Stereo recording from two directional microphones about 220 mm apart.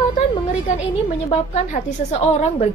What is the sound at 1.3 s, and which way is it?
A woman's voice, 30° left (ahead or behind).